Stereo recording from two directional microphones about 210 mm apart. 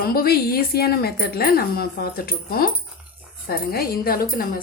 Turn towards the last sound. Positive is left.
turn(degrees=45)  # may be behind; listen again after turning